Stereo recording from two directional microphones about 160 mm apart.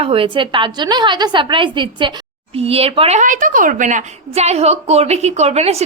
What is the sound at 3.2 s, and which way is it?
A woman's voice, 55° right (ahead or behind).